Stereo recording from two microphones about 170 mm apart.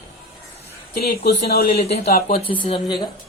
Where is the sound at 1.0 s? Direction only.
65° left (ahead or behind).